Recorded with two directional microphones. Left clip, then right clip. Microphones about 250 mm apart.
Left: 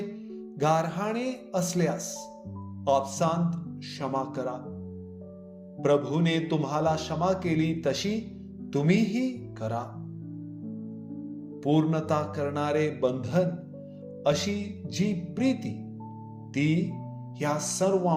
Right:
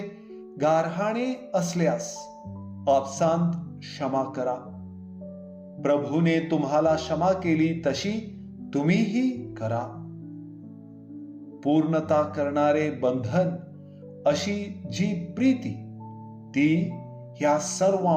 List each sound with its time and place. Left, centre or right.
0.6 s a man's voice: left
5.8 s a man's voice: left
11.6 s a man's voice: left